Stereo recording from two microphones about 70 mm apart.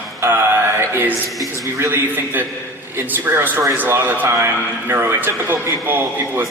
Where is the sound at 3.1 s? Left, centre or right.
Right.